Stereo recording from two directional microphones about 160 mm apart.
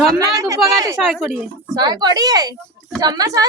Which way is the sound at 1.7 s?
25° right (ahead or behind).